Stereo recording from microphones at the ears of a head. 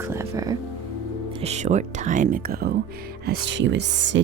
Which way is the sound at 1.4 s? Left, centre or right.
Right.